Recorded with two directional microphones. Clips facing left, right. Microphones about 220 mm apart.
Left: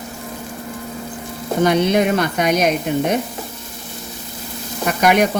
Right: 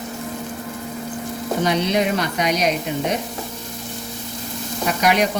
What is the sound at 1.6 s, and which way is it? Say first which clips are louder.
Speech: left 5 dB; 50° left (ahead or behind).